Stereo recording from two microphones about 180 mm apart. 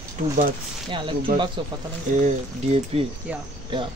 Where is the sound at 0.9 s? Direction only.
30° right (ahead or behind).